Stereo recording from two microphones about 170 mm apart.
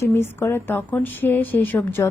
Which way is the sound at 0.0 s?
15° left (ahead or behind).